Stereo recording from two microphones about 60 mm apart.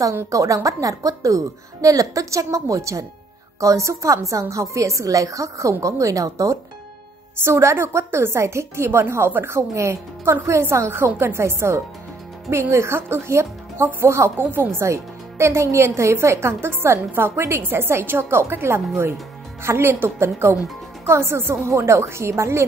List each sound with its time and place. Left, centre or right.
0.3 s a woman's voice: right
7.4 s a woman's voice: right
14.4 s speech: right
14.8 s a woman's voice: right